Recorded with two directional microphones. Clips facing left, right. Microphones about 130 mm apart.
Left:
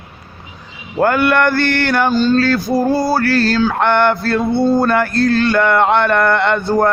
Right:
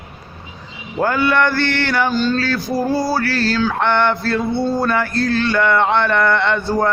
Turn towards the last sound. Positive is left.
turn(degrees=50)  # may be behind; listen again after turning